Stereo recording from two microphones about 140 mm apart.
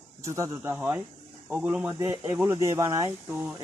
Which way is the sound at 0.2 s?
20° right (ahead or behind).